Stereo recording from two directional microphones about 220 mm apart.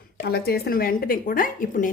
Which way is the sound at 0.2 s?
45° left (ahead or behind).